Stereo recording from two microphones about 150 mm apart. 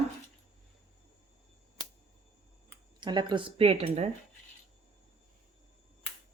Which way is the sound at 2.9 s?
30° right (ahead or behind).